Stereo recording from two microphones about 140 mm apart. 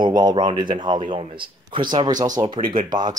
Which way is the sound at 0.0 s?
30° right (ahead or behind).